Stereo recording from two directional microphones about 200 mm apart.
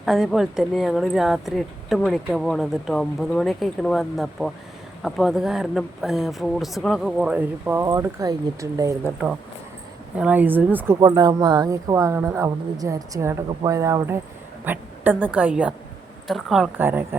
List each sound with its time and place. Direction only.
0.0 s speech: centre (ahead or behind)
9.0 s a woman's voice: 5° right (ahead or behind)